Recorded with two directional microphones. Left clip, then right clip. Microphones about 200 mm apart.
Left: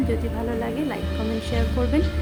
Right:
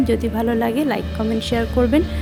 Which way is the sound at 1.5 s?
25° right (ahead or behind).